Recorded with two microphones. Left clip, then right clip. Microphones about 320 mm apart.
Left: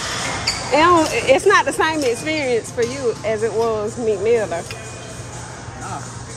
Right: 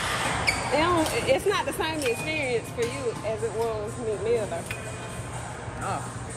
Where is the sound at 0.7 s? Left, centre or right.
Left.